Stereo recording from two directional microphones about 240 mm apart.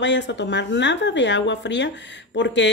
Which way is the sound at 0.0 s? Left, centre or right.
Left.